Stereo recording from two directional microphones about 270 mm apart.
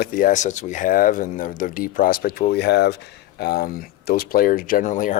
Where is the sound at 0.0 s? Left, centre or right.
Left.